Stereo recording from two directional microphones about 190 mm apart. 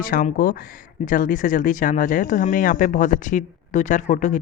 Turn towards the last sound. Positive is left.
turn(degrees=40)  # may be behind; listen again after turning